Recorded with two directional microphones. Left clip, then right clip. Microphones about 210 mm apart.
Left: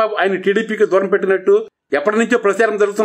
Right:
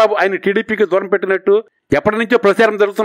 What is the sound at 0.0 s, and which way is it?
A man's voice, 40° right (ahead or behind).